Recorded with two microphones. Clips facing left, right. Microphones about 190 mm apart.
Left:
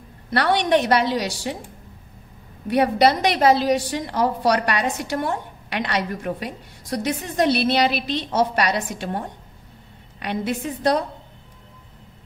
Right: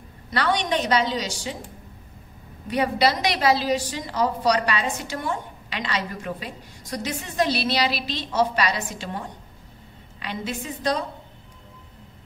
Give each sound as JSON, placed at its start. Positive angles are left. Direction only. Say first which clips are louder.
{"t": 0.3, "sound": "a woman's voice", "louder": "left 5 dB", "side_deg": 60}
{"t": 2.7, "sound": "a woman's voice", "louder": "left 4 dB", "side_deg": 55}